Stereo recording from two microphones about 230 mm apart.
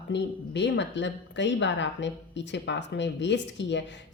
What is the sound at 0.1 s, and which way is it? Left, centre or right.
A woman's voice, left.